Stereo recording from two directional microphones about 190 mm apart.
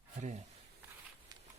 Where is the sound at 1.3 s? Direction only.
20° right (ahead or behind).